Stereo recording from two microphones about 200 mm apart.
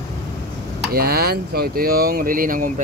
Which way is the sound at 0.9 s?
50° right (ahead or behind).